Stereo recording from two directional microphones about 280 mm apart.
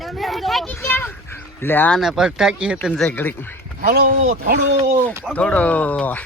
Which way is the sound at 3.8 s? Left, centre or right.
Right.